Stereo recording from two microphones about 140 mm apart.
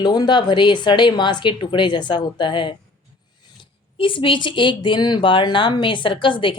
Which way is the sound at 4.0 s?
40° left (ahead or behind).